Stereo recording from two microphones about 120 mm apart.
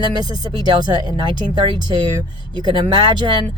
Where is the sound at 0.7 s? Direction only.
35° right (ahead or behind).